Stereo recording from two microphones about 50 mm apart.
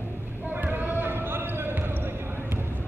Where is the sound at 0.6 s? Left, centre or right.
Right.